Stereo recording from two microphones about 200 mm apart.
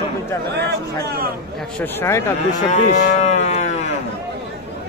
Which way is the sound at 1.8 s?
10° left (ahead or behind).